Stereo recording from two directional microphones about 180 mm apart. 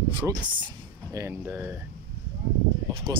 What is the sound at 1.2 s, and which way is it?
Speech, 10° right (ahead or behind).